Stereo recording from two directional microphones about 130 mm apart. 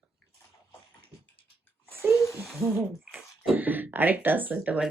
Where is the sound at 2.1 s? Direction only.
20° left (ahead or behind).